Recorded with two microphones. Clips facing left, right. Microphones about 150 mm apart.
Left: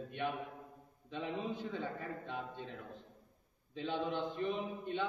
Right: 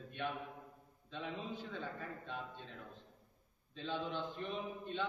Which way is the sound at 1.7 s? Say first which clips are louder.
Left 4 dB; 15° left (ahead or behind).